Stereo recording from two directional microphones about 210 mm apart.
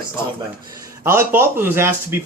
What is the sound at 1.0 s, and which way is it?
A man's voice, 10° right (ahead or behind).